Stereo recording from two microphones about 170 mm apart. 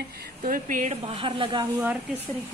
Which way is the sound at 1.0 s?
30° right (ahead or behind).